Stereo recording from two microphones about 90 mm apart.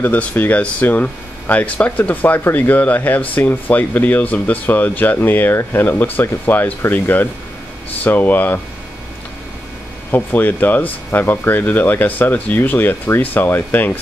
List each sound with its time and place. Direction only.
0.0 s speech: 20° left (ahead or behind)
10.1 s speech: 20° left (ahead or behind)